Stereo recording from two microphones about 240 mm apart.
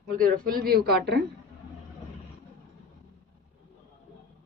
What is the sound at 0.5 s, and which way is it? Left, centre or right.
Speech, right.